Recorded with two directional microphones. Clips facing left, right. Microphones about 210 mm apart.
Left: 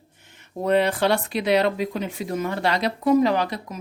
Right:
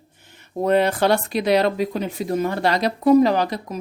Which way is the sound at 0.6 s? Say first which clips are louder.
Right 2 dB; 45° right (ahead or behind).